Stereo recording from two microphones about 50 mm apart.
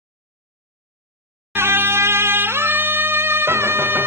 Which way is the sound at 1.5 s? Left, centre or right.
Right.